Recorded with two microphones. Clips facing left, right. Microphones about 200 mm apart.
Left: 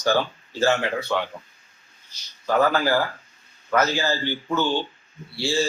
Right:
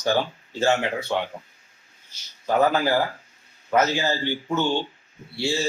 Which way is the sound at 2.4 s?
20° right (ahead or behind).